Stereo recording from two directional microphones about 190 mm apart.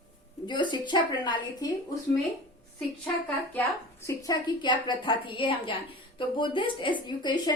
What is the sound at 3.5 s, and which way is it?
Speech, 15° left (ahead or behind).